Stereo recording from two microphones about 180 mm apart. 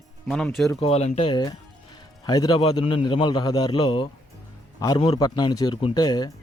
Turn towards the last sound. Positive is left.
turn(degrees=20)  # may be behind; listen again after turning